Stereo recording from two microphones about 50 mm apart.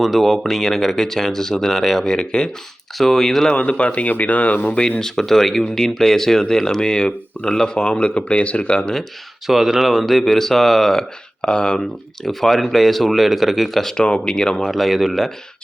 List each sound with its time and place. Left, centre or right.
0.0 s speech: centre
3.0 s speech: centre
3.5 s speech: left
4.7 s speech: centre
8.8 s speech: centre
9.5 s speech: centre
14.0 s speech: centre
14.7 s speech: centre